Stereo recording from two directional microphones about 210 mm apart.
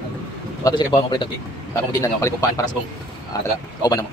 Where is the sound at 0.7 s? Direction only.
20° left (ahead or behind).